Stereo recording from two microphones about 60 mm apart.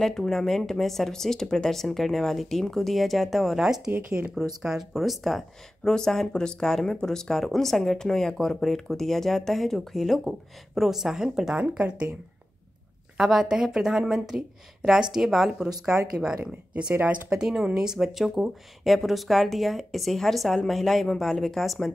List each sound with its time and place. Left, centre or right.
0.0 s speech: centre
13.2 s speech: centre